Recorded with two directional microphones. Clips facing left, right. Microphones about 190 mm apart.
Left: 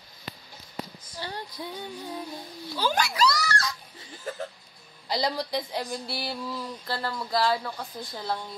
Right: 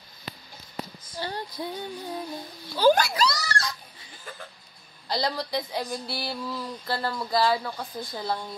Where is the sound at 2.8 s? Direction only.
35° right (ahead or behind).